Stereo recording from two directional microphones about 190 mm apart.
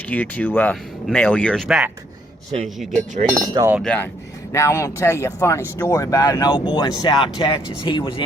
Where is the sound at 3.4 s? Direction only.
20° right (ahead or behind).